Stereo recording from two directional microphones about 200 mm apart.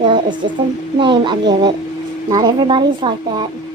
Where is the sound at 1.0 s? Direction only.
25° right (ahead or behind).